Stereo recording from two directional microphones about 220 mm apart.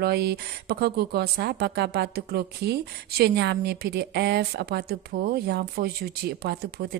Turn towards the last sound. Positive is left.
turn(degrees=-45)  # may be behind; listen again after turning